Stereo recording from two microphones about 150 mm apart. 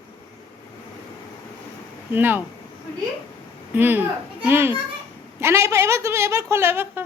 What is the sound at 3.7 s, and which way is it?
A child's voice, 15° right (ahead or behind).